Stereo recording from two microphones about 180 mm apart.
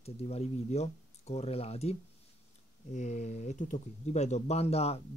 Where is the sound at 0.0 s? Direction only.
35° left (ahead or behind).